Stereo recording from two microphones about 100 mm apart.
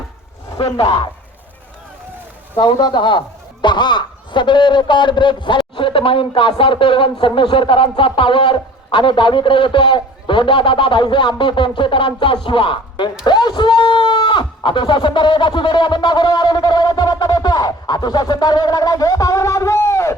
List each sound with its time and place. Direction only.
0.6 s speech: 60° left (ahead or behind)
2.6 s speech: 50° left (ahead or behind); by 20.1 s 30° left (ahead or behind)